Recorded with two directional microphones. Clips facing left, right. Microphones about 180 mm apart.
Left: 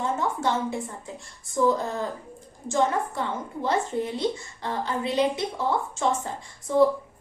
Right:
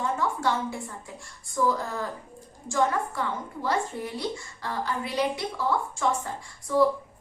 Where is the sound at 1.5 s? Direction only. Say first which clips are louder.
Left 3 dB; 20° left (ahead or behind).